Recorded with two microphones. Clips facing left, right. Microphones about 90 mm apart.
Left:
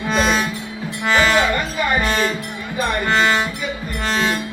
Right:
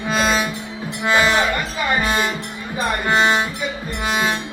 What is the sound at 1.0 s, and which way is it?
Music, 15° right (ahead or behind).